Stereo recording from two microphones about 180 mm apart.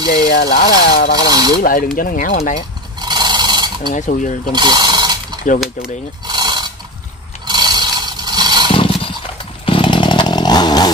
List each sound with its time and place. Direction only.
0.1 s speech: 65° left (ahead or behind)
1.3 s mechanisms: 20° right (ahead or behind)
1.6 s speech: 50° left (ahead or behind)
3.0 s a sound: 25° right (ahead or behind)
3.9 s speech: 45° left (ahead or behind)
4.5 s a sound: 25° right (ahead or behind)
7.4 s scrape: 25° right (ahead or behind)
8.7 s a sound: 30° left (ahead or behind)
9.7 s chainsaw: 25° left (ahead or behind)